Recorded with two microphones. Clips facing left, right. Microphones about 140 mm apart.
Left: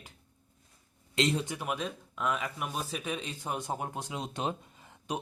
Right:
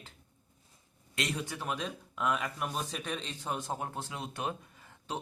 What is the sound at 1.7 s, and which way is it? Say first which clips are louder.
A man's voice: left 2 dB; centre (ahead or behind).